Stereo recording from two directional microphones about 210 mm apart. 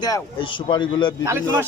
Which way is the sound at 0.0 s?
20° left (ahead or behind).